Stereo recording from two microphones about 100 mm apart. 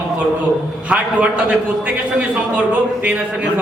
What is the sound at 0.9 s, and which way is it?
Speech, 10° right (ahead or behind).